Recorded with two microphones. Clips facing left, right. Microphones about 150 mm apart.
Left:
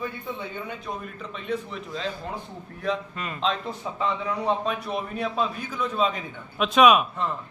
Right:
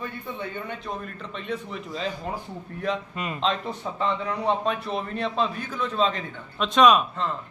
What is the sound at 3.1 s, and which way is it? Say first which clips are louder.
Speech: right 2 dB; 20° right (ahead or behind).